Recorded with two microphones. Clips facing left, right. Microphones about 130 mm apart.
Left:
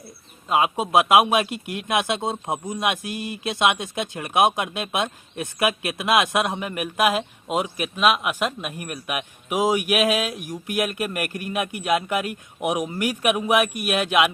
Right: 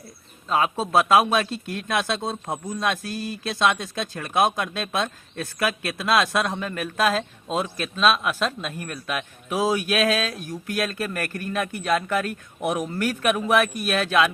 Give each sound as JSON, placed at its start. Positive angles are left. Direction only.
{"t": 0.4, "sound": "a man's voice", "side_deg": 15}